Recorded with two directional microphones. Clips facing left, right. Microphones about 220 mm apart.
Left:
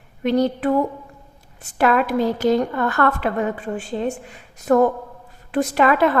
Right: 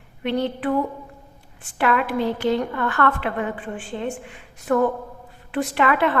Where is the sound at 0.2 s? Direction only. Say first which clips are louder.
Left 5 dB; 40° left (ahead or behind).